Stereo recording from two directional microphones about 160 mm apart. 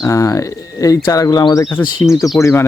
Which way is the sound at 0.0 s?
20° left (ahead or behind).